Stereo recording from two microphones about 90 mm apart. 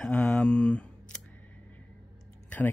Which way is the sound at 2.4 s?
20° left (ahead or behind).